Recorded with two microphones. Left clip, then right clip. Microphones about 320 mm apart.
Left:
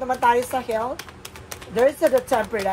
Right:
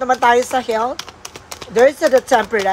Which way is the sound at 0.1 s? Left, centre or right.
Right.